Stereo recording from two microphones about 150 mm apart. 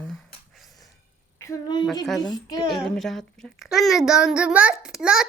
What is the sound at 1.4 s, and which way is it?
Speech, 25° left (ahead or behind).